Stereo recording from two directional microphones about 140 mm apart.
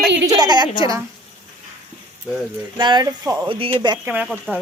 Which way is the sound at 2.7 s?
35° right (ahead or behind).